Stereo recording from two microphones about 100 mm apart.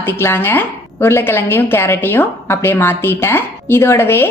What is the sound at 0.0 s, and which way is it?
A woman's voice, 20° left (ahead or behind).